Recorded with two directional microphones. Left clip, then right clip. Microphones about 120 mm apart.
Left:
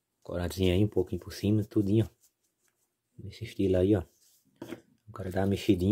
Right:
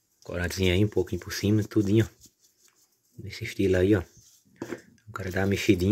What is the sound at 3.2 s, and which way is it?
Speech, 15° left (ahead or behind).